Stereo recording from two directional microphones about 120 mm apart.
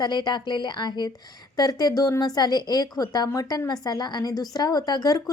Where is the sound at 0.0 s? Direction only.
40° left (ahead or behind).